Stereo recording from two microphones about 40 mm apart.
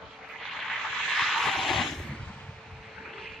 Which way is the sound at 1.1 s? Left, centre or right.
Centre.